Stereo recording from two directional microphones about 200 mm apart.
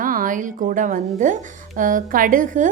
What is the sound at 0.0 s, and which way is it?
A woman's voice, 45° right (ahead or behind).